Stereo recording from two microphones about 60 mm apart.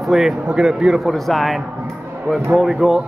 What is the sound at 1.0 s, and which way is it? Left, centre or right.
Speech, centre.